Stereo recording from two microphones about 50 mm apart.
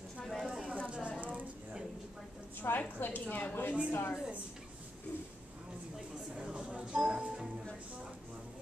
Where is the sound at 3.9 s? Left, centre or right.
Left.